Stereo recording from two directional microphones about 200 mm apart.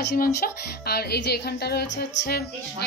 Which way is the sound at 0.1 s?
50° left (ahead or behind).